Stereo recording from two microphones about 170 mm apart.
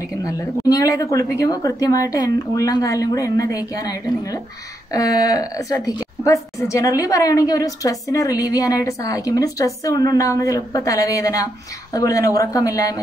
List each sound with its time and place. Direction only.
0.2 s a woman's voice: 20° left (ahead or behind)